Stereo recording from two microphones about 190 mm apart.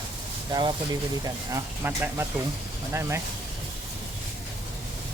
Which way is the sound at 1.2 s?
15° right (ahead or behind).